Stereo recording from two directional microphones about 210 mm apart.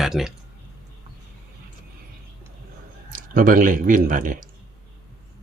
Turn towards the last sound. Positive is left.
turn(degrees=-40)  # may be behind; listen again after turning